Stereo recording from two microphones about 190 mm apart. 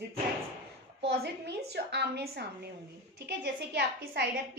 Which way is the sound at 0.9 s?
65° right (ahead or behind).